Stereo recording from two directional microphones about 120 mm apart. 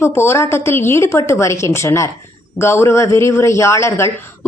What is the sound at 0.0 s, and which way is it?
Speech, 20° left (ahead or behind).